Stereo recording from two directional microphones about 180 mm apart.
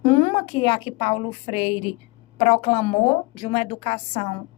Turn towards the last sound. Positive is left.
turn(degrees=35)  # may be behind; listen again after turning